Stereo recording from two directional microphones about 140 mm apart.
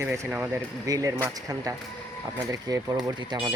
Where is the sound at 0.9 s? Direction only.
25° right (ahead or behind).